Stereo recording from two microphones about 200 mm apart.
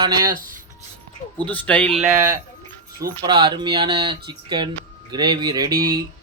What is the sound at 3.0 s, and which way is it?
Speech, 20° right (ahead or behind).